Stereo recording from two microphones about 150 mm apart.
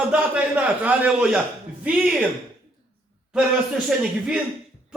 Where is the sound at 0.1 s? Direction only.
10° right (ahead or behind).